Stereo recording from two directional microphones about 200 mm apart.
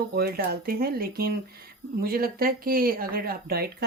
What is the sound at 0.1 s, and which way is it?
Speech, 50° right (ahead or behind).